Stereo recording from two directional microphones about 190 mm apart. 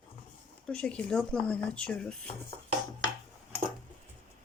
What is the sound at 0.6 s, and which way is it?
Speech, 5° left (ahead or behind).